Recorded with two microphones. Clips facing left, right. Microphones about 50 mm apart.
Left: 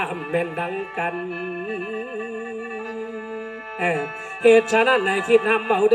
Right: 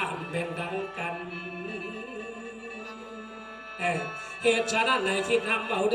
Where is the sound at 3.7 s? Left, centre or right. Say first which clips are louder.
Left 6 dB; left.